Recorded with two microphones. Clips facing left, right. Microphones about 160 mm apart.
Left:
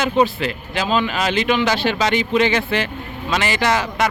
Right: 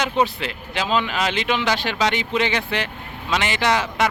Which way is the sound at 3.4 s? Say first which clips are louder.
Left 2 dB; 20° right (ahead or behind).